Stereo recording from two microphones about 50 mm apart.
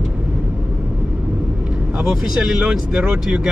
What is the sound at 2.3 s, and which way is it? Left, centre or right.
Speech, centre.